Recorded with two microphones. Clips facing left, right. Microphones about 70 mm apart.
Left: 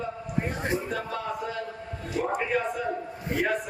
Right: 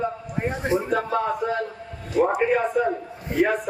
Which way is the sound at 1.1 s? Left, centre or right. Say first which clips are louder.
Right 8 dB; right.